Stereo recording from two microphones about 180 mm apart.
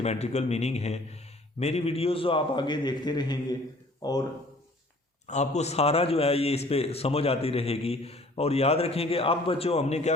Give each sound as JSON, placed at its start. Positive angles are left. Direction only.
{"t": 0.0, "sound": "a man's voice", "side_deg": 35}
{"t": 5.3, "sound": "a man's voice", "side_deg": 40}